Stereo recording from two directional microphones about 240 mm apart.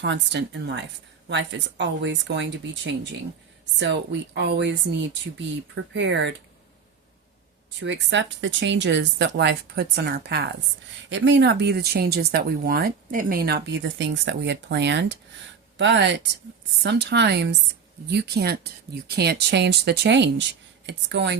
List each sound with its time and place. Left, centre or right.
0.0 s speech: right
7.8 s speech: right